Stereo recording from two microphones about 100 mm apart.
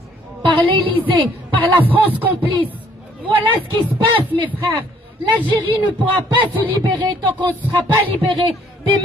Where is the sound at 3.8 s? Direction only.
50° right (ahead or behind).